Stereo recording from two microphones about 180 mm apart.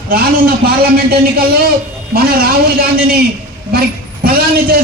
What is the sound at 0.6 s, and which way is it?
Speech, 60° right (ahead or behind).